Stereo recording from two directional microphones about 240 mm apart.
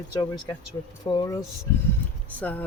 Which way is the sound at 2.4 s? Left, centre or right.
Centre.